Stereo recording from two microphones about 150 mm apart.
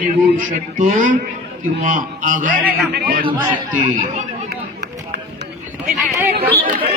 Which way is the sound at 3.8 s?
55° right (ahead or behind).